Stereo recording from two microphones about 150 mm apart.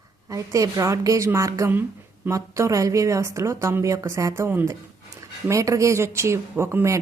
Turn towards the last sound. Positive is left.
turn(degrees=-20)  # may be behind; listen again after turning